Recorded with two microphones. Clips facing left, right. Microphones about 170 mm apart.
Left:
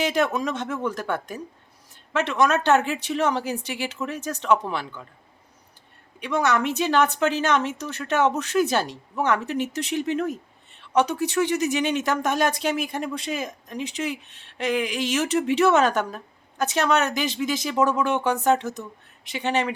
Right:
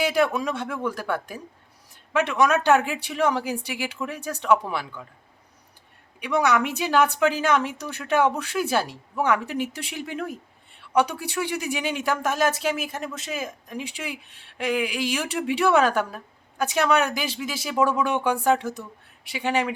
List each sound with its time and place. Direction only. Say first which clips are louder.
0.0 s speech: right 1 dB; 10° right (ahead or behind)
4.2 s speech: right 1 dB; 10° right (ahead or behind)
6.1 s speech: right 1 dB; 10° right (ahead or behind)